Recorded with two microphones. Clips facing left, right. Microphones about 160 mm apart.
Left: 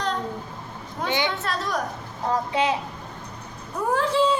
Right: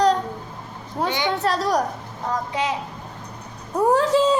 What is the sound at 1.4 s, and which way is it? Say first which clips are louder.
Speech: right 6 dB; 35° right (ahead or behind).